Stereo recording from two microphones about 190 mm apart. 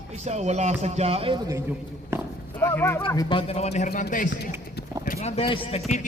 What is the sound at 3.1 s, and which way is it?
Speech, 20° left (ahead or behind).